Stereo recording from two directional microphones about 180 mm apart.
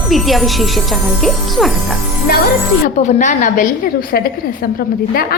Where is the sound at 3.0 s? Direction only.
45° left (ahead or behind).